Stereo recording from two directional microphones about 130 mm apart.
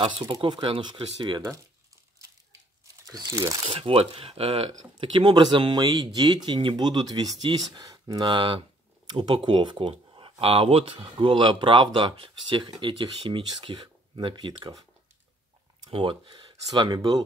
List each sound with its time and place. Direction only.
0.0 s speech: 40° right (ahead or behind)
3.1 s speech: 25° right (ahead or behind)
3.6 s speech: 45° right (ahead or behind)
15.9 s speech: 40° right (ahead or behind)